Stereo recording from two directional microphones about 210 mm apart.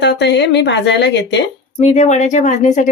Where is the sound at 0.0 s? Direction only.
55° left (ahead or behind).